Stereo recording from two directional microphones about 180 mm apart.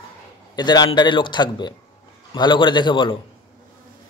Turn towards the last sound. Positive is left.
turn(degrees=25)  # may be behind; listen again after turning